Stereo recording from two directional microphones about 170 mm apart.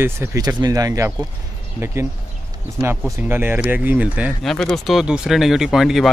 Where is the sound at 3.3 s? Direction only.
10° right (ahead or behind).